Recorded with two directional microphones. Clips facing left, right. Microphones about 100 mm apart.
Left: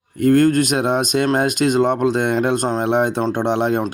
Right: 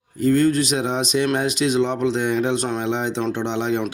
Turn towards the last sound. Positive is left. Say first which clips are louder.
# left 4 dB
turn(degrees=50)  # may be behind; listen again after turning